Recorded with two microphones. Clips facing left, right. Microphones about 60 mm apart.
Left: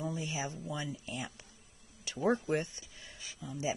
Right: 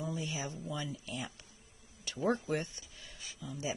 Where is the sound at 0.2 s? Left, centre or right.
Left.